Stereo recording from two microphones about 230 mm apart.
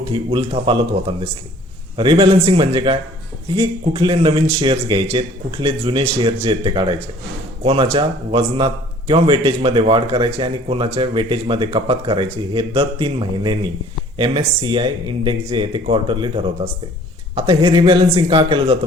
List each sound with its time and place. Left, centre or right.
0.0 s speech: right